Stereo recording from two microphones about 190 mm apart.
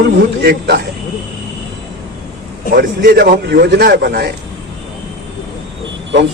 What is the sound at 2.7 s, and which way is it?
Speech, 50° right (ahead or behind).